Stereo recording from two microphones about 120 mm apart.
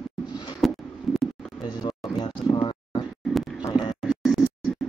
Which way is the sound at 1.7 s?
40° left (ahead or behind).